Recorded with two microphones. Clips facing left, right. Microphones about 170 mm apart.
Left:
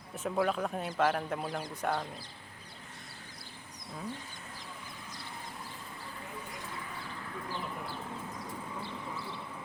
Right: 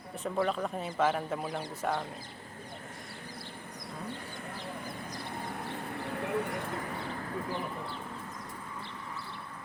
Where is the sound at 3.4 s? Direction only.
60° right (ahead or behind).